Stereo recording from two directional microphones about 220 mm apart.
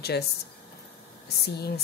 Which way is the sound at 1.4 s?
45° left (ahead or behind).